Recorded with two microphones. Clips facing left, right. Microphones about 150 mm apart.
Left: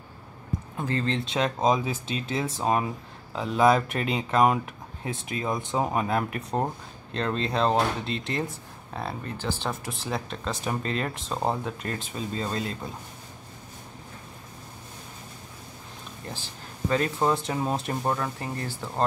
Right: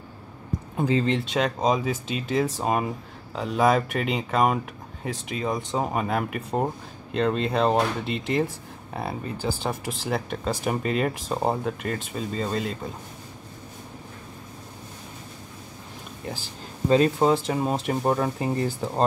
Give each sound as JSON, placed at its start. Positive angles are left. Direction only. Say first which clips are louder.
{"t": 0.7, "sound": "speech", "louder": "right 5 dB", "side_deg": -15}
{"t": 16.9, "sound": "speech", "louder": "right 6 dB", "side_deg": -20}
{"t": 17.5, "sound": "speech", "louder": "right 3 dB", "side_deg": 0}
{"t": 18.0, "sound": "speech", "louder": "right 5 dB", "side_deg": -15}